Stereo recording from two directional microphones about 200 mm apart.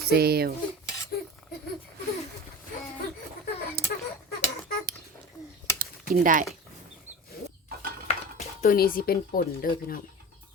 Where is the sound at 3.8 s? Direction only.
50° right (ahead or behind).